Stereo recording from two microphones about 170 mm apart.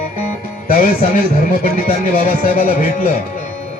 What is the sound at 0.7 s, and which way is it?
Speech, 55° left (ahead or behind).